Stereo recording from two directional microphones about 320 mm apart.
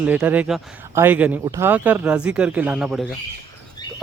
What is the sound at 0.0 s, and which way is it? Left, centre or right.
Speech, centre.